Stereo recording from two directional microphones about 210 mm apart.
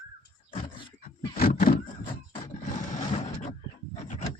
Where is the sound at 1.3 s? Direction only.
45° left (ahead or behind).